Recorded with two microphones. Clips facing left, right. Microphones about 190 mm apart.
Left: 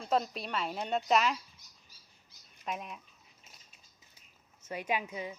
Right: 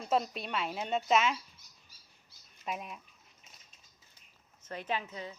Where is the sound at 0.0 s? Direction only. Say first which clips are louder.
Even; centre (ahead or behind).